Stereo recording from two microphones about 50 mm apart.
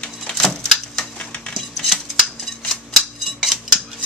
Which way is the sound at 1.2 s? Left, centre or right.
Left.